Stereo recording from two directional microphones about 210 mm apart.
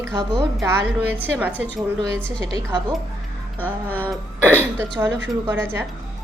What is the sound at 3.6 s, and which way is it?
Music, 10° left (ahead or behind).